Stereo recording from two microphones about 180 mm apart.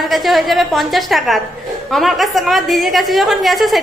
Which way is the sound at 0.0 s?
Centre (ahead or behind).